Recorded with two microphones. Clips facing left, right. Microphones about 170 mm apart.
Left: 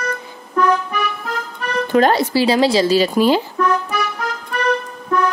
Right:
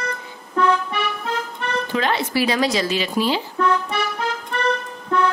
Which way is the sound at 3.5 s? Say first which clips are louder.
Left 2 dB; 30° right (ahead or behind).